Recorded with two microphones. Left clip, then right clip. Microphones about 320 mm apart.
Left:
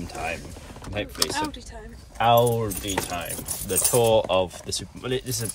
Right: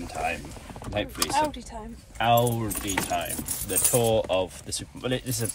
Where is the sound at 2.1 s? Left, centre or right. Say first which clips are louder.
Left 4 dB; centre.